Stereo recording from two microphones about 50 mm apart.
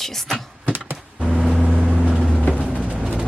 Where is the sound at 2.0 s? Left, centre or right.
Centre.